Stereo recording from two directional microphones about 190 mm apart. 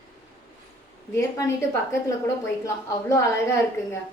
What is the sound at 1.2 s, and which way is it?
A woman's voice, 15° left (ahead or behind).